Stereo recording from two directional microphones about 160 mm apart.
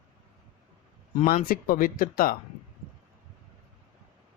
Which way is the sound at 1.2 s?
55° left (ahead or behind).